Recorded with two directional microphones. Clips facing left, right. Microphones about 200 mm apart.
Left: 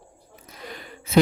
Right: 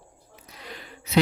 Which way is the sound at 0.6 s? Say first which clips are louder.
Left 3 dB; 50° left (ahead or behind).